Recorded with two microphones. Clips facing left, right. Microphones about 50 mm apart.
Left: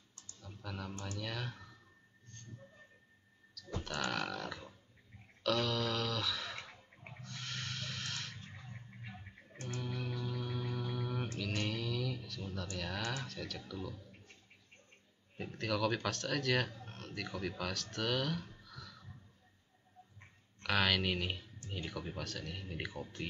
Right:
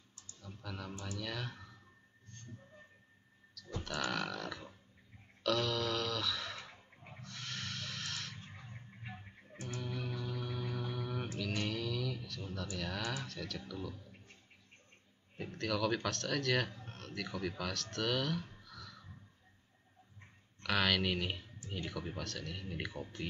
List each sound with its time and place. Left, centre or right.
0.4 s speech: centre
3.8 s speech: centre
5.4 s a sound: centre
8.4 s a sound: centre
9.8 s music: centre
11.3 s a sound: centre
13.7 s speech: centre
15.3 s speech: centre
20.6 s speech: centre